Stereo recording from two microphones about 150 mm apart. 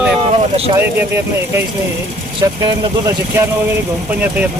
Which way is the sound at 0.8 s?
15° right (ahead or behind).